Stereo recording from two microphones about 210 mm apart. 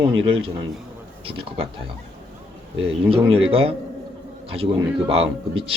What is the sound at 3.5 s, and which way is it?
Speech, 25° right (ahead or behind).